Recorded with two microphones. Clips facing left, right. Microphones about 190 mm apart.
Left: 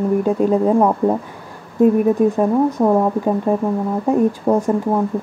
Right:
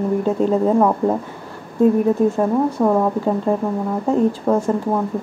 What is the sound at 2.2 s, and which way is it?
Speech, 15° left (ahead or behind).